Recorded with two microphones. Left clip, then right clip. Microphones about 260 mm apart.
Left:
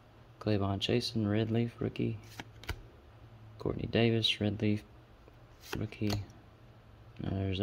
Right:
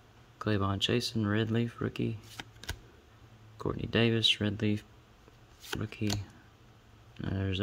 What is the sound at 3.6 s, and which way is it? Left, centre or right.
Speech, centre.